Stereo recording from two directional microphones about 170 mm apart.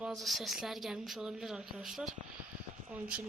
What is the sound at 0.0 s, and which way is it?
A woman's voice, centre (ahead or behind).